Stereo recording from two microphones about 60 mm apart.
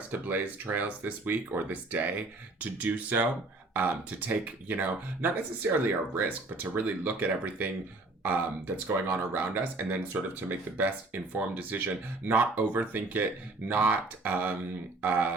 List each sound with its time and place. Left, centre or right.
0.1 s speech: right